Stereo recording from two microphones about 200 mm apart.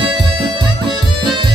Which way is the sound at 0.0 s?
25° right (ahead or behind).